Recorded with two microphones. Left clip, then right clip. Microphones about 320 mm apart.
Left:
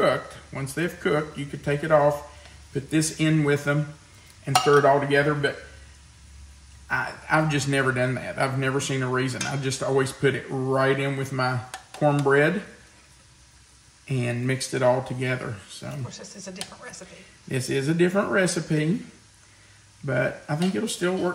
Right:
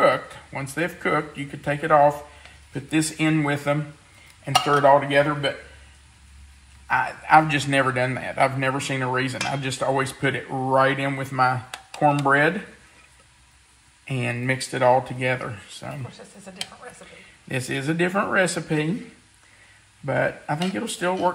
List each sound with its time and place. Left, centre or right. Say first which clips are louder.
0.0 s a man's voice: right 3 dB; centre
4.8 s cutlery: right 3 dB; centre
6.9 s a man's voice: right 7 dB; centre
14.0 s a man's voice: right 3 dB; centre
17.5 s a man's voice: even; centre
20.1 s a man's voice: right 2 dB; centre